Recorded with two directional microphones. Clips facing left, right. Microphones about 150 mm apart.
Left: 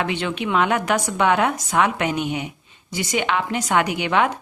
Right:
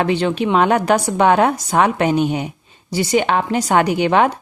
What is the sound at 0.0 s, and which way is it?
A woman's voice, 35° right (ahead or behind).